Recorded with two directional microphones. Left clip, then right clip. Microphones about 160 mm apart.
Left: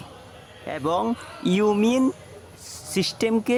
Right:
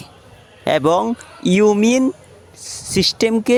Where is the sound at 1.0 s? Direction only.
20° right (ahead or behind).